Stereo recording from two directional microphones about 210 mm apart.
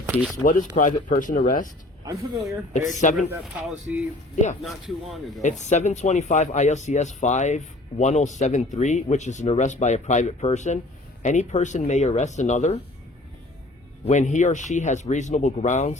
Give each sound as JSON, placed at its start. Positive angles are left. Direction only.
{"t": 0.0, "sound": "speech", "side_deg": 0}
{"t": 0.4, "sound": "speech", "side_deg": 40}
{"t": 2.7, "sound": "speech", "side_deg": 35}
{"t": 3.2, "sound": "speech", "side_deg": -5}
{"t": 5.4, "sound": "speech", "side_deg": 35}
{"t": 14.1, "sound": "speech", "side_deg": 35}